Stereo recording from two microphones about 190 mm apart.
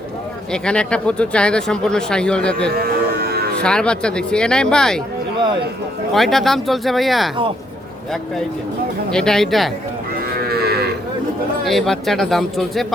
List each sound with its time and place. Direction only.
0.5 s speech: 5° left (ahead or behind)
2.7 s music: 55° right (ahead or behind)
3.6 s speech: 5° left (ahead or behind)
6.1 s speech: centre (ahead or behind)
9.0 s speech: 5° left (ahead or behind)
10.4 s moo: 55° right (ahead or behind)
11.6 s speech: centre (ahead or behind)